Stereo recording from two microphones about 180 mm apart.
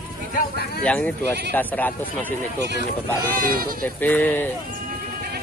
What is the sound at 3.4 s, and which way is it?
Speech, 55° right (ahead or behind).